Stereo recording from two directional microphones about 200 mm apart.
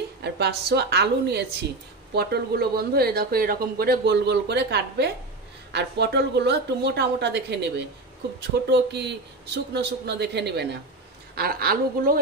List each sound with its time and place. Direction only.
0.2 s a man's voice: 55° right (ahead or behind)